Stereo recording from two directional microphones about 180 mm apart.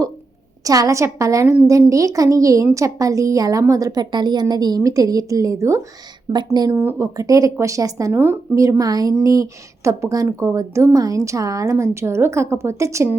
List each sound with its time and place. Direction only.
0.6 s a woman's voice: 20° right (ahead or behind)